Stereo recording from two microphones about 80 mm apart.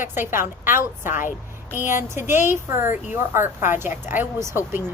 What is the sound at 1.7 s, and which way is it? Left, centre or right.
A woman's voice, right.